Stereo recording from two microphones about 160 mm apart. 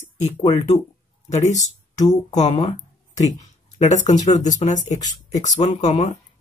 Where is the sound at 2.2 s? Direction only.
45° left (ahead or behind).